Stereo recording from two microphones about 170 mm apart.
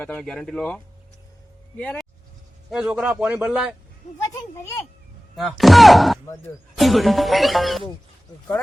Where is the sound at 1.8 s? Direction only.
10° left (ahead or behind).